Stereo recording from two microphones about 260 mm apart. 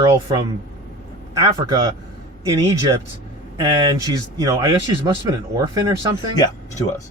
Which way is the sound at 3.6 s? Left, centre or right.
Centre.